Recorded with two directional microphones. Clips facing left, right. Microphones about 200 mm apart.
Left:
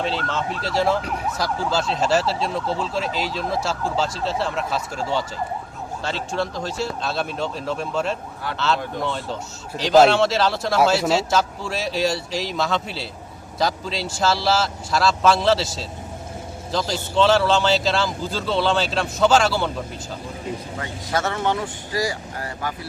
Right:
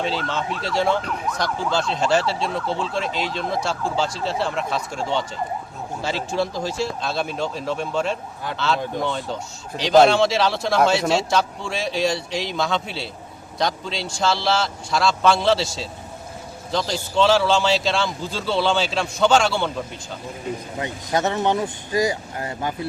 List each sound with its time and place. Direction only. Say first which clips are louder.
0.6 s speech: even; centre (ahead or behind)
20.7 s speech: right 3 dB; 20° right (ahead or behind)